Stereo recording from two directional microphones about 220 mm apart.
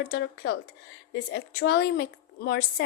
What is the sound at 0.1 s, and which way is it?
A woman's voice, 50° left (ahead or behind).